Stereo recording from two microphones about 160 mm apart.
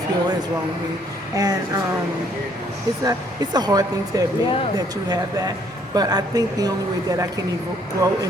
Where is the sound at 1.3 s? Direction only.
25° right (ahead or behind).